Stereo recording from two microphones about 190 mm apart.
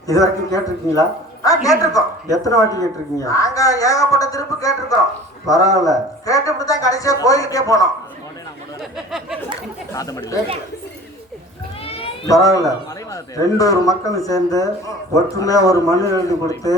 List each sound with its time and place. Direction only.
0.1 s a man's voice: 20° left (ahead or behind)
8.8 s a sound: centre (ahead or behind)
9.9 s a man's voice: 20° left (ahead or behind)
12.2 s a man's voice: 15° left (ahead or behind)